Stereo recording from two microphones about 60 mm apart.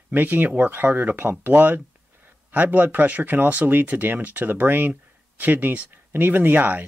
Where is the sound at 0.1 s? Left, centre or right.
Right.